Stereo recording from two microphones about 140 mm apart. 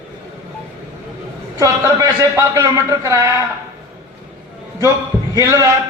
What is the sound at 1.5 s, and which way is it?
A man's voice, 25° right (ahead or behind).